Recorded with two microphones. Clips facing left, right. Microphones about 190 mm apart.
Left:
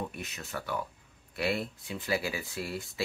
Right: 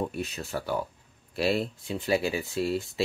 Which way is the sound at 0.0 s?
30° right (ahead or behind).